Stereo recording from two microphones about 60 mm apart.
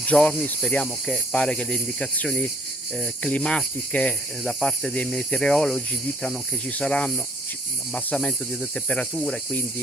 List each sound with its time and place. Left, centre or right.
0.0 s cricket: centre
0.4 s speech: centre
1.3 s speech: centre
8.3 s speech: centre
8.7 s speech: centre